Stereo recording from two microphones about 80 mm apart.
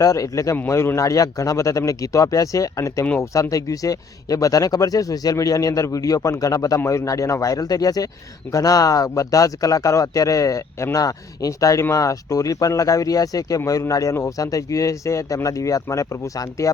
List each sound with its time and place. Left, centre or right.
0.0 s speech: left